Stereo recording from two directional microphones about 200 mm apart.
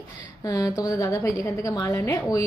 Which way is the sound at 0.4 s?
20° left (ahead or behind).